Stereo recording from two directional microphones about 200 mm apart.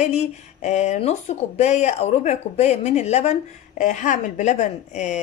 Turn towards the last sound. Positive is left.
turn(degrees=35)  # may be behind; listen again after turning